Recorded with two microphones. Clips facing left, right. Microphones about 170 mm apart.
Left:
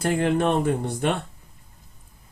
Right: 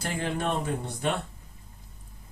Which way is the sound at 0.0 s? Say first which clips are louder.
Left 9 dB; 55° left (ahead or behind).